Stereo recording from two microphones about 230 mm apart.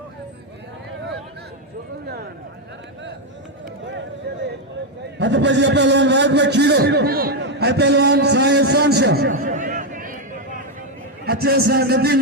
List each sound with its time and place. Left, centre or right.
5.2 s a man's voice: right
11.3 s a man's voice: right